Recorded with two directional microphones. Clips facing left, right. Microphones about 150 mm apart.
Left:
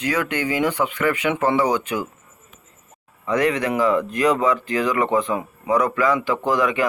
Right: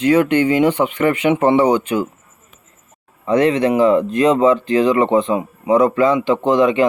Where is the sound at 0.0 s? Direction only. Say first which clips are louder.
Right 10 dB; 25° right (ahead or behind).